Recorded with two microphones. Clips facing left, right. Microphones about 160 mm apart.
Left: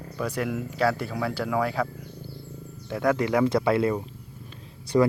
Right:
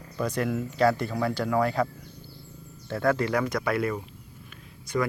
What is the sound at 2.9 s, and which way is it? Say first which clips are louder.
Speech: left 1 dB; 15° left (ahead or behind).